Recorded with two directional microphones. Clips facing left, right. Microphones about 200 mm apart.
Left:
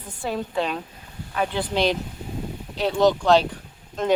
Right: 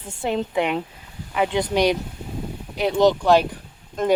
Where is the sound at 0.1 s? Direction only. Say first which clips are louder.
Right 4 dB; 20° right (ahead or behind).